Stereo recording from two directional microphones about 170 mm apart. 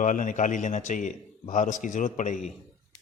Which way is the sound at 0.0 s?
50° left (ahead or behind).